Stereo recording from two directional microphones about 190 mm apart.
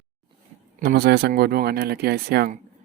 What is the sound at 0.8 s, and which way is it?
Speech, 55° right (ahead or behind).